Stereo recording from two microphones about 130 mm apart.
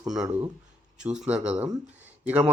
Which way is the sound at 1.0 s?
10° right (ahead or behind).